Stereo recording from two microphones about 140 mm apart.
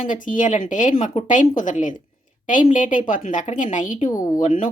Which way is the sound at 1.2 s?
50° left (ahead or behind).